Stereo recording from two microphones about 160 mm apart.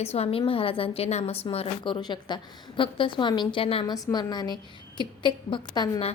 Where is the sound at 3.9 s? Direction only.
25° left (ahead or behind).